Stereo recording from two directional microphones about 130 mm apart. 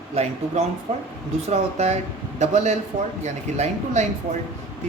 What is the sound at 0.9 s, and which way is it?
A man's voice, 60° right (ahead or behind).